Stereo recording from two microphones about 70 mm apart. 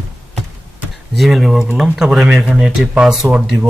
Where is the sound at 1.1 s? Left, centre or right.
Centre.